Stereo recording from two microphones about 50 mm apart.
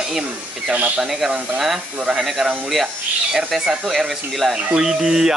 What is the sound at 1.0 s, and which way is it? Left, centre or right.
Speech, centre.